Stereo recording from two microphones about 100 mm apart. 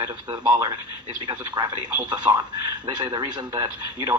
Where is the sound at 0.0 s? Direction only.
40° right (ahead or behind).